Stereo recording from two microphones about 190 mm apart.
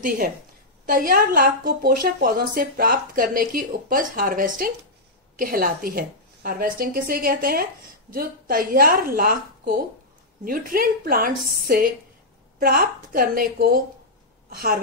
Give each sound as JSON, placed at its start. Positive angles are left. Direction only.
{"t": 0.8, "sound": "a woman's voice", "side_deg": -50}